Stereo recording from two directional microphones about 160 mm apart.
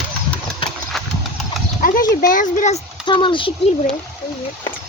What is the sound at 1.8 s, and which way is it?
Speech, 60° left (ahead or behind).